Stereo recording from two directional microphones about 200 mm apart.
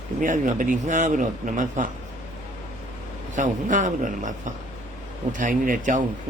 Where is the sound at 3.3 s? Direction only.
40° right (ahead or behind).